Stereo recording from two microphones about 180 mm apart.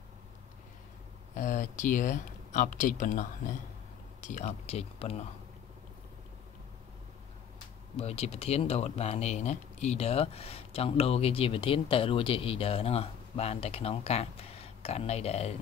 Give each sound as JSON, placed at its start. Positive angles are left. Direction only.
{"t": 1.3, "sound": "speech", "side_deg": 45}
{"t": 7.9, "sound": "speech", "side_deg": 35}